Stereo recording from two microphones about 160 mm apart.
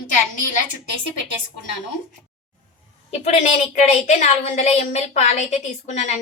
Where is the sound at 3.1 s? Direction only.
45° left (ahead or behind).